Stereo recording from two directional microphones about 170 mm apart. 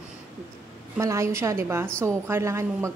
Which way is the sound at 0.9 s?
20° right (ahead or behind).